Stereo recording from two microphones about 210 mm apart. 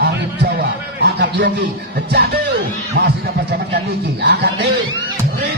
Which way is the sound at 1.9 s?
50° right (ahead or behind).